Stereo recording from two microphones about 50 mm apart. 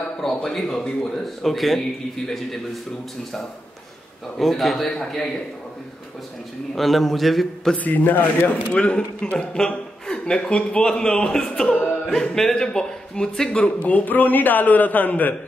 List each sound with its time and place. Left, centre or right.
0.2 s a man's voice: centre
4.4 s speech: centre
6.7 s a man's voice: centre
7.7 s a man's voice: left; by 13.6 s centre
13.6 s a man's voice: left